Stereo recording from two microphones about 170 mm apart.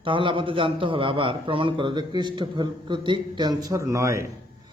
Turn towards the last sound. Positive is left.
turn(degrees=-20)  # may be behind; listen again after turning